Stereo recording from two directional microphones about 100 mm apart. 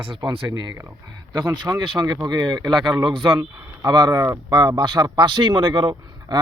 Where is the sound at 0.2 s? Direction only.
45° right (ahead or behind).